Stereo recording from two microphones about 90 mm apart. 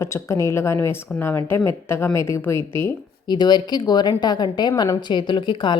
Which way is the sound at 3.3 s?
55° left (ahead or behind).